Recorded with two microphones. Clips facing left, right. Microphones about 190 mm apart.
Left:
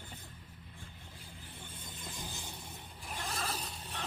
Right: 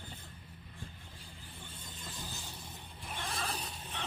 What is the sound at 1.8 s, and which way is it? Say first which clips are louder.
Vehicle: left 1 dB; 15° left (ahead or behind).